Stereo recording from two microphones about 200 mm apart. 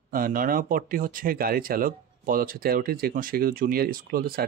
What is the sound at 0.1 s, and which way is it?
Speech, 45° right (ahead or behind).